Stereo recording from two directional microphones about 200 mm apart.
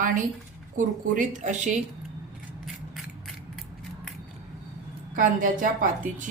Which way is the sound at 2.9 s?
Centre (ahead or behind).